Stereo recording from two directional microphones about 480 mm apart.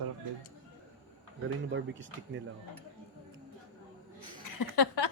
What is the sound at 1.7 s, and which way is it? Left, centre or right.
Speech, right.